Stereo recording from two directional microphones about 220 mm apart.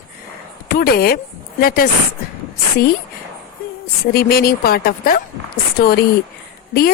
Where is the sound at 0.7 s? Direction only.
45° left (ahead or behind).